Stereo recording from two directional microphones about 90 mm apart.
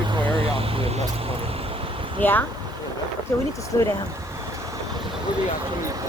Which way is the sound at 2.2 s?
20° left (ahead or behind).